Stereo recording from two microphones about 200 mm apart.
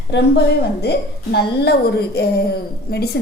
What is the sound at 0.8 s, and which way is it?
A woman's voice, 55° left (ahead or behind).